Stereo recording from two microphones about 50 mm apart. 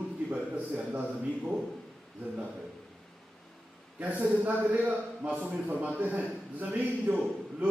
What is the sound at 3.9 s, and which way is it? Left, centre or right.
A man's voice, right.